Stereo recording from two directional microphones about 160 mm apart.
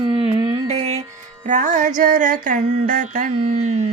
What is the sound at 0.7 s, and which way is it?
Speech, 35° right (ahead or behind).